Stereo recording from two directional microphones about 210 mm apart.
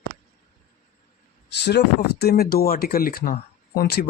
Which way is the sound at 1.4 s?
55° left (ahead or behind).